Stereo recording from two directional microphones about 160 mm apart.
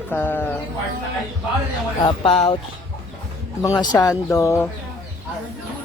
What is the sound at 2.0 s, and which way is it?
Speech, 40° left (ahead or behind).